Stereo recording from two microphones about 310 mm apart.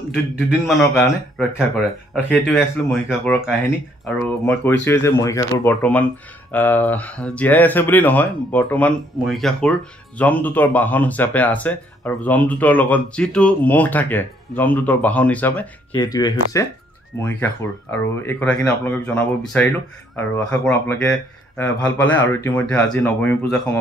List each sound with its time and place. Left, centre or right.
0.1 s speech: centre